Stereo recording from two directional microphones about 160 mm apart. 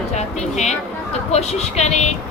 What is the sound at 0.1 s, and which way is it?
A woman's voice, 45° left (ahead or behind).